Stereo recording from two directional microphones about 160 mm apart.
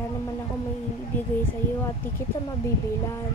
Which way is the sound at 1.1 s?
10° left (ahead or behind).